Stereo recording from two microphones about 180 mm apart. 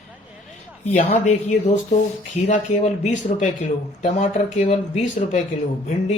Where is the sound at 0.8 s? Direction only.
40° left (ahead or behind).